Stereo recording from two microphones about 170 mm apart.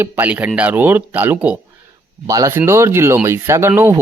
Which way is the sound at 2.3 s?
20° right (ahead or behind).